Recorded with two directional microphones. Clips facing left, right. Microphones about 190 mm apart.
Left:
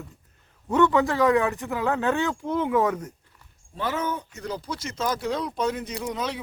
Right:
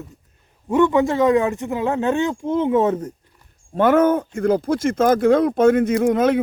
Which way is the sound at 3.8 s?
55° right (ahead or behind).